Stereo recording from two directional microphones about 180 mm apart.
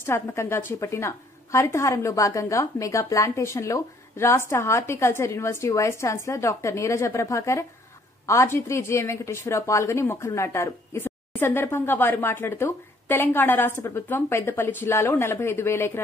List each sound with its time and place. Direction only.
0.0 s a woman's voice: 15° left (ahead or behind)